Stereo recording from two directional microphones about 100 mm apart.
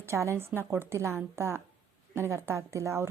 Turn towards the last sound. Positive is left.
turn(degrees=-30)  # may be behind; listen again after turning